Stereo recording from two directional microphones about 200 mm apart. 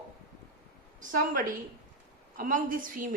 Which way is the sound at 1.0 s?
40° right (ahead or behind).